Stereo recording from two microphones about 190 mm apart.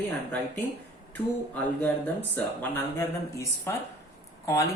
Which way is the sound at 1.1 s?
10° left (ahead or behind).